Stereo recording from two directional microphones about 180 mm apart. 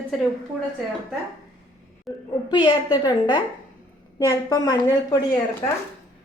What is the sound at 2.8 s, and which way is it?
A woman's voice, 20° left (ahead or behind).